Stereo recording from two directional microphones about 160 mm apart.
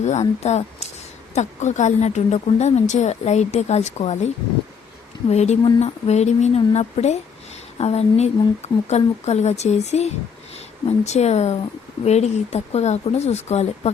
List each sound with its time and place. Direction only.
0.0 s speech: 45° left (ahead or behind)
5.3 s speech: 45° left (ahead or behind)